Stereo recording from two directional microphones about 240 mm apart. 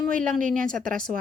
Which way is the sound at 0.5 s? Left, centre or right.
Right.